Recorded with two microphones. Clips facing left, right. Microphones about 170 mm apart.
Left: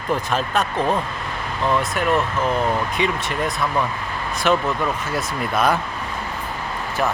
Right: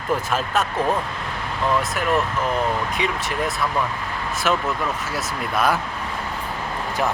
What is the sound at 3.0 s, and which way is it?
Speech, centre (ahead or behind).